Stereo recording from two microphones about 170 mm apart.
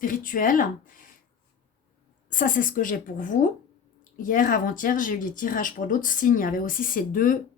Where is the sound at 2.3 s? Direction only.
55° left (ahead or behind).